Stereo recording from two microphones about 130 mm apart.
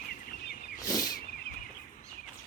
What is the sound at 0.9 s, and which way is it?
Vehicle, 30° left (ahead or behind).